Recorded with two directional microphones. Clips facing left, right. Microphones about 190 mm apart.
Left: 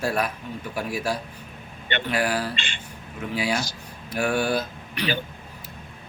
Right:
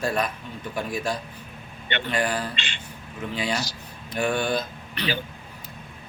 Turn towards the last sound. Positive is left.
turn(degrees=10)  # may be behind; listen again after turning